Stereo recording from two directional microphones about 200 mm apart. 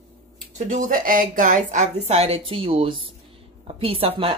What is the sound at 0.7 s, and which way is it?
Speech, 40° right (ahead or behind).